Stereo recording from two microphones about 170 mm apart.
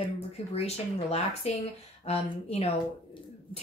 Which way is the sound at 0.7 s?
40° left (ahead or behind).